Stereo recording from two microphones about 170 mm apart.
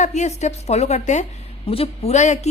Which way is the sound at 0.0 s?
45° left (ahead or behind).